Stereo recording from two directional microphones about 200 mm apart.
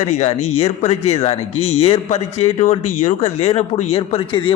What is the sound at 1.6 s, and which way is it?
Speech, 90° left.